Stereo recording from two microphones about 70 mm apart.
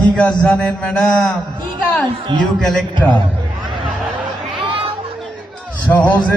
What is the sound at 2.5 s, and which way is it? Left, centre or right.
Music, centre.